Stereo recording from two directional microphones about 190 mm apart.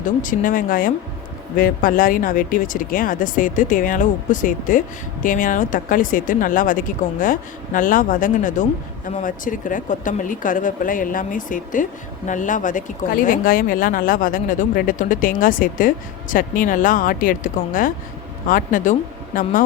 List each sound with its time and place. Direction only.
0.0 s a woman's voice: 45° left (ahead or behind)